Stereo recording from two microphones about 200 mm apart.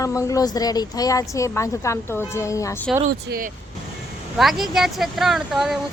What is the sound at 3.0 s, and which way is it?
Speech, 45° right (ahead or behind).